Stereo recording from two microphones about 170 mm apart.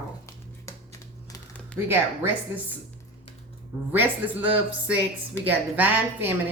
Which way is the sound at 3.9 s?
10° right (ahead or behind).